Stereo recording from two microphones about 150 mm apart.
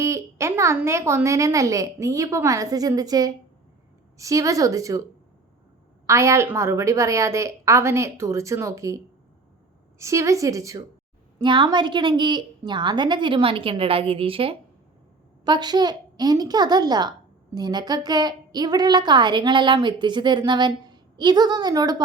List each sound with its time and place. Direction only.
0.0 s a child's voice: 20° right (ahead or behind)
6.1 s a child's voice: 20° right (ahead or behind)
10.0 s a child's voice: 20° right (ahead or behind)